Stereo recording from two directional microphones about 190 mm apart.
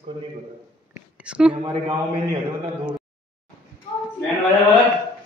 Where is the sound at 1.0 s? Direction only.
5° right (ahead or behind).